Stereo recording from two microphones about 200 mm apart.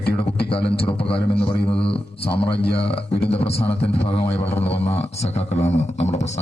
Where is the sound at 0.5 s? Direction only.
25° left (ahead or behind).